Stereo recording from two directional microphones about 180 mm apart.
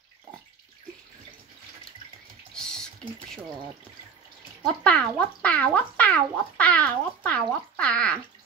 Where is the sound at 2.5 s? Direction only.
5° left (ahead or behind).